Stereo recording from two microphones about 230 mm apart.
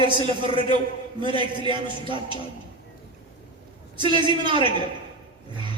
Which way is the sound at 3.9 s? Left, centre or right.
Right.